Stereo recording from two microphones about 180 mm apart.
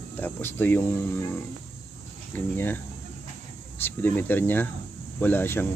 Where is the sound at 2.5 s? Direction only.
10° left (ahead or behind).